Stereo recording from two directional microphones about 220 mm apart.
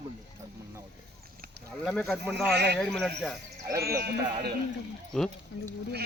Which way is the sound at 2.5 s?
50° right (ahead or behind).